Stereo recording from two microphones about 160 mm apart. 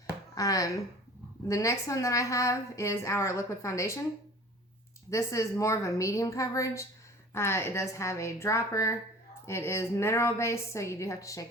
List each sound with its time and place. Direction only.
0.3 s a woman's voice: 20° left (ahead or behind)
5.1 s a woman's voice: 20° left (ahead or behind)